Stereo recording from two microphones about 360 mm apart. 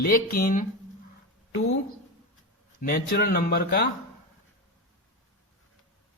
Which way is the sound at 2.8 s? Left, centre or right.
Left.